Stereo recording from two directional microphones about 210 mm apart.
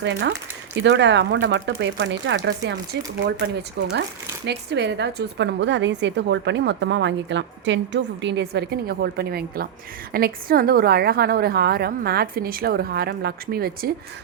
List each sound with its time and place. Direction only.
0.0 s a woman's voice: 60° right (ahead or behind)